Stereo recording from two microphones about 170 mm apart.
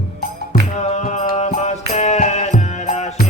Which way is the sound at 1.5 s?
40° left (ahead or behind).